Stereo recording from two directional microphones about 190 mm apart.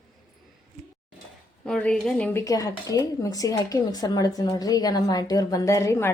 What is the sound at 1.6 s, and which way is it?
Speech, 5° left (ahead or behind).